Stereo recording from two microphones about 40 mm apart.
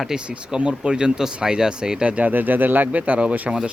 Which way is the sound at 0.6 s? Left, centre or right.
Right.